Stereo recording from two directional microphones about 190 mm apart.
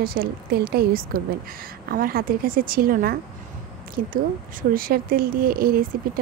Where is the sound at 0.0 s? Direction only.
50° right (ahead or behind).